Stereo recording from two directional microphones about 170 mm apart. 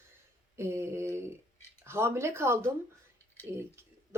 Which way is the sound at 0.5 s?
15° right (ahead or behind).